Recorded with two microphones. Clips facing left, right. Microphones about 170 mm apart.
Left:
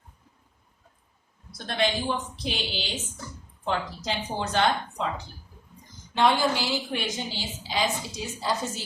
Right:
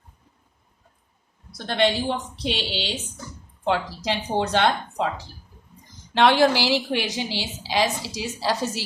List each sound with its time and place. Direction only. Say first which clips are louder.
1.5 s a woman's voice: right 5 dB; 70° right (ahead or behind)
6.1 s a woman's voice: right 5 dB; 75° right (ahead or behind)